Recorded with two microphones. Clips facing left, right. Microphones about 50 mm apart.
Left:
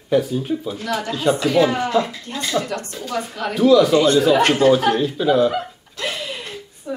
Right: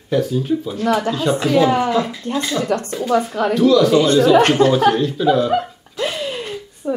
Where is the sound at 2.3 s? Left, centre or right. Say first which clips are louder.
Right 5 dB; centre.